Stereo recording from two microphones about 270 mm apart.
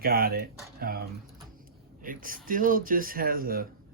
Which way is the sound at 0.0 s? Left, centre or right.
Right.